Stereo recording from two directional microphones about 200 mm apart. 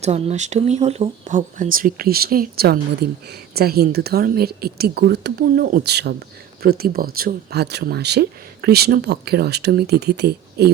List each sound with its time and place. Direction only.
0.0 s speech: 35° right (ahead or behind); by 10.7 s 55° right (ahead or behind)